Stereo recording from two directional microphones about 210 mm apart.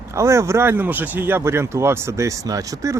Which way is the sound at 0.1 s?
15° right (ahead or behind).